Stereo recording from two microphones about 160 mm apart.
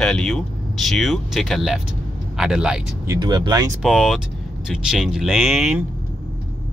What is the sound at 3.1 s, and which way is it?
Speech, 25° right (ahead or behind).